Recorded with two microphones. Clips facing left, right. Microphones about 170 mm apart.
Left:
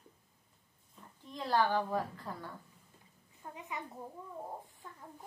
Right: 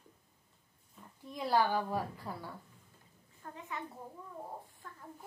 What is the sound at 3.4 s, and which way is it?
Speech, 15° left (ahead or behind).